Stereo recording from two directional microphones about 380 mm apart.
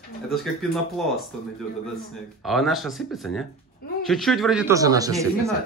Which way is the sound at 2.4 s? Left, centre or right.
Centre.